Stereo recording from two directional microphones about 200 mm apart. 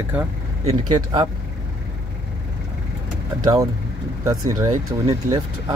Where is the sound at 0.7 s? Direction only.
25° right (ahead or behind).